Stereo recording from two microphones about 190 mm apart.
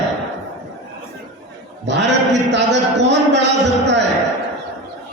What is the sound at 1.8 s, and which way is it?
A man's voice, 65° right (ahead or behind).